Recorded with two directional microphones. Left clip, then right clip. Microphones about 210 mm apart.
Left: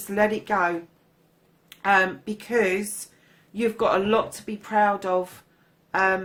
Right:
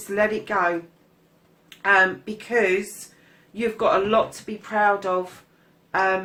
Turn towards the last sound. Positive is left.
turn(degrees=45)  # may be behind; listen again after turning